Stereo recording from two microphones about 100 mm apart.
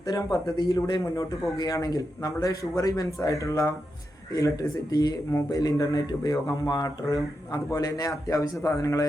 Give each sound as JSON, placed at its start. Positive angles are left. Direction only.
{"t": 0.1, "sound": "speech", "side_deg": 45}
{"t": 0.4, "sound": "speech", "side_deg": 30}